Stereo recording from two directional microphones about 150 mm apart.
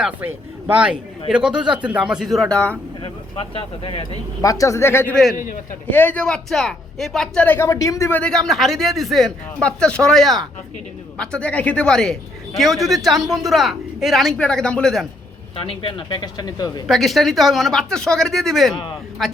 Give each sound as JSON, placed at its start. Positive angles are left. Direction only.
{"t": 0.0, "sound": "speech", "side_deg": -10}
{"t": 3.0, "sound": "speech", "side_deg": 35}
{"t": 4.4, "sound": "speech", "side_deg": 20}
{"t": 8.2, "sound": "speech", "side_deg": 5}
{"t": 15.5, "sound": "speech", "side_deg": 35}
{"t": 16.8, "sound": "speech", "side_deg": 0}
{"t": 18.7, "sound": "speech", "side_deg": 30}
{"t": 19.2, "sound": "speech", "side_deg": 0}